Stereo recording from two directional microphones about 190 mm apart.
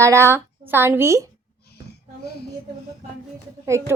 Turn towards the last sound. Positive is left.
turn(degrees=-15)  # may be behind; listen again after turning